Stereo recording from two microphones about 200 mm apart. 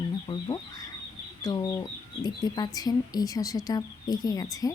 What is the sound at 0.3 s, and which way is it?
Chicken, 20° left (ahead or behind).